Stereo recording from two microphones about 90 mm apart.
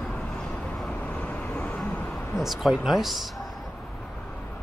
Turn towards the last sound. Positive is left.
turn(degrees=0)  # may be behind; listen again after turning